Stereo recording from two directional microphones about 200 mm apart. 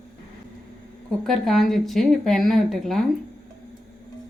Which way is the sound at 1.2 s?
Centre (ahead or behind).